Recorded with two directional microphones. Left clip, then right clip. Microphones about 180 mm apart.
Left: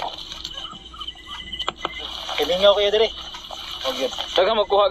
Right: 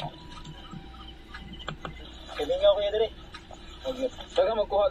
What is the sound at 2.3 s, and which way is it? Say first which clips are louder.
A man's voice: left 6 dB; 25° left (ahead or behind).